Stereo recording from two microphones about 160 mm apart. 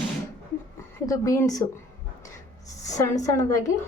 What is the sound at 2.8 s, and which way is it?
Speech, 20° left (ahead or behind).